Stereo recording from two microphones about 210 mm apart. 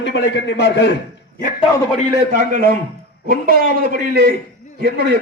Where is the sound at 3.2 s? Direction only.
45° right (ahead or behind).